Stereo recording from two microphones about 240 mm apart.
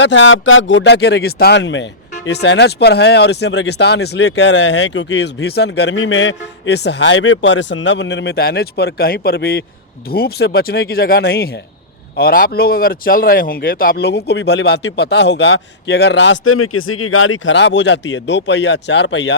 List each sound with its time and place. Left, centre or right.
0.0 s speech: left